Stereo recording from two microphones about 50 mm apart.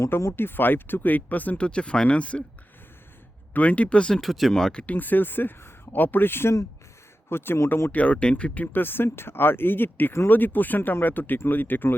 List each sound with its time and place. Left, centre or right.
0.3 s speech: left
3.5 s speech: left
4.2 s speech: centre
4.7 s speech: centre
4.9 s speech: left
7.9 s speech: left